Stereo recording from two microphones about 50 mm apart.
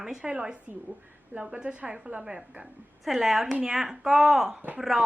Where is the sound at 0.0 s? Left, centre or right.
Centre.